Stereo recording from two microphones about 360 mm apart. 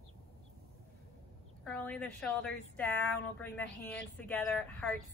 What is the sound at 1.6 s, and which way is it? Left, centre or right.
A woman's voice, centre.